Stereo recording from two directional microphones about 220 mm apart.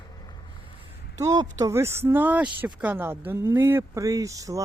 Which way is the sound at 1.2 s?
15° right (ahead or behind).